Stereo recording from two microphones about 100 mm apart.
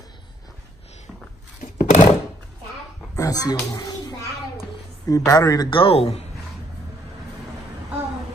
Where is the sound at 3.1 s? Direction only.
35° left (ahead or behind).